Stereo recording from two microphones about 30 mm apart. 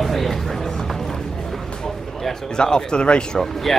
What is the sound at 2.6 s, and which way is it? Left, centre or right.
Speech, left.